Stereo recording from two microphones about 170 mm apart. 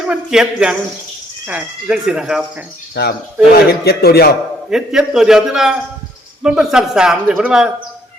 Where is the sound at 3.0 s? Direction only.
70° left (ahead or behind).